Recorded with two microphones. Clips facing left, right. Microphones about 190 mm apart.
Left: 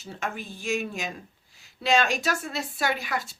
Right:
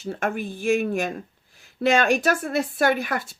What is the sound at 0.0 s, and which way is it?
Speech, 55° right (ahead or behind).